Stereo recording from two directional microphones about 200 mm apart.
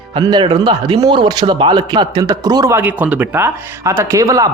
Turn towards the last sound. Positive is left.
turn(degrees=-15)  # may be behind; listen again after turning